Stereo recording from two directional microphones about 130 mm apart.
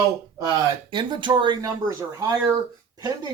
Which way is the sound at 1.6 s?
25° right (ahead or behind).